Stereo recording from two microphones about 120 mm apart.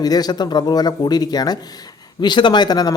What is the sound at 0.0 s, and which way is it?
Speech, 35° left (ahead or behind).